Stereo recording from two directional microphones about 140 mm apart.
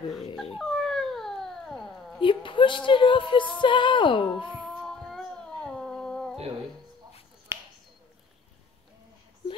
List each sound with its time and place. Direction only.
0.6 s dog: centre (ahead or behind)
2.2 s speech: 35° left (ahead or behind)
4.6 s a sound: centre (ahead or behind)
7.5 s finger snapping: 20° right (ahead or behind)